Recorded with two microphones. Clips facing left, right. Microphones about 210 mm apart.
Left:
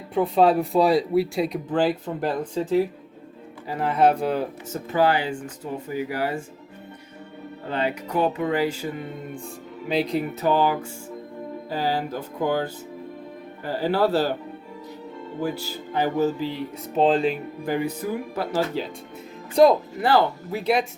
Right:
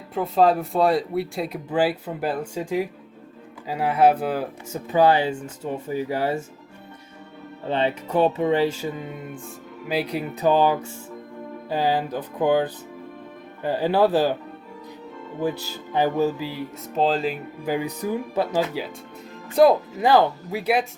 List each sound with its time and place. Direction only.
0.1 s speech: centre (ahead or behind)
4.9 s speech: 20° right (ahead or behind)
7.7 s speech: 25° right (ahead or behind)
9.9 s speech: 10° right (ahead or behind)
15.9 s music: 15° right (ahead or behind)
16.2 s speech: 10° right (ahead or behind)
17.7 s speech: 15° right (ahead or behind)
20.0 s speech: 15° right (ahead or behind)